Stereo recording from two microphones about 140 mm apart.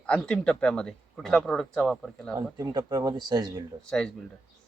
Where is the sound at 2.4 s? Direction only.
30° right (ahead or behind).